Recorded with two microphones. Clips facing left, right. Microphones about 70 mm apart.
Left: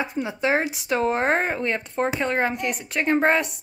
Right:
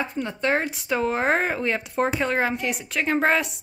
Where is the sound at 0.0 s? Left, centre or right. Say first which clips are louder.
Left 1 dB; centre.